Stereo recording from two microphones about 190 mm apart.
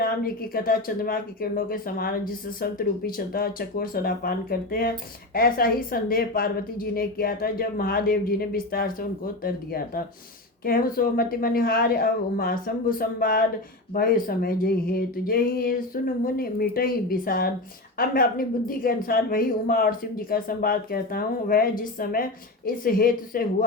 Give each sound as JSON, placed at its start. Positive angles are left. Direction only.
{"t": 0.0, "sound": "speech", "side_deg": 50}